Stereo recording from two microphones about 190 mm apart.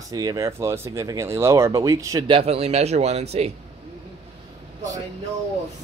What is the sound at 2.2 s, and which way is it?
Speech, 30° right (ahead or behind).